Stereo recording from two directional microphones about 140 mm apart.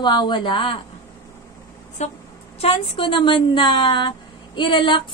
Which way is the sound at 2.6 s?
40° left (ahead or behind).